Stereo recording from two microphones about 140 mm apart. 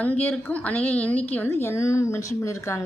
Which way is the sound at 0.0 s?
10° left (ahead or behind).